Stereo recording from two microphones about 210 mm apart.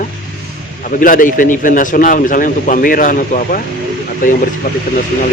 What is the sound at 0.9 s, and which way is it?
A man's voice, 40° left (ahead or behind).